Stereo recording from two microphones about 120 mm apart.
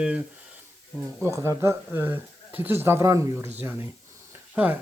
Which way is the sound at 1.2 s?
25° right (ahead or behind).